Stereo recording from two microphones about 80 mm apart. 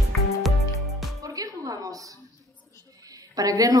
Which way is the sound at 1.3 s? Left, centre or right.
Right.